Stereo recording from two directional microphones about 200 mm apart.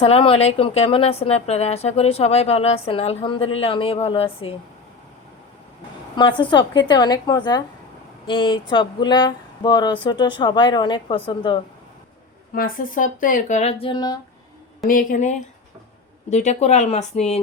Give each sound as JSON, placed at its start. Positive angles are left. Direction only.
{"t": 0.0, "sound": "a woman's voice", "side_deg": 30}
{"t": 6.1, "sound": "a woman's voice", "side_deg": 25}
{"t": 12.5, "sound": "speech", "side_deg": 45}
{"t": 14.8, "sound": "speech", "side_deg": 40}